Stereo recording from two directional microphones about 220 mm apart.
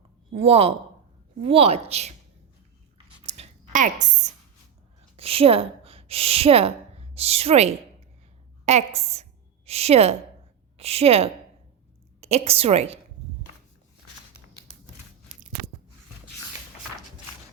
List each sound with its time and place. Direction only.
0.3 s a woman's voice: 25° right (ahead or behind)
3.2 s a sound: 30° right (ahead or behind)
5.1 s a woman's voice: 25° right (ahead or behind)